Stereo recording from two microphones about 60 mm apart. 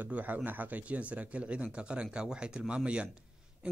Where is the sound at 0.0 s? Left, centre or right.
Right.